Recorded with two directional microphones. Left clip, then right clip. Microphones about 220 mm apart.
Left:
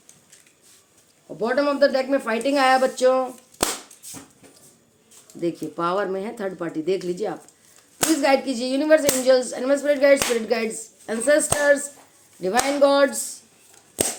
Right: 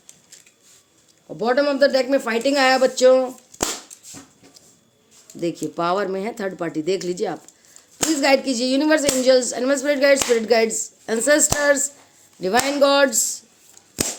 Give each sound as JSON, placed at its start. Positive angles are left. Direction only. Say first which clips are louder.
{"t": 1.4, "sound": "speech", "louder": "right 2 dB", "side_deg": -45}
{"t": 5.4, "sound": "speech", "louder": "right 2 dB", "side_deg": -40}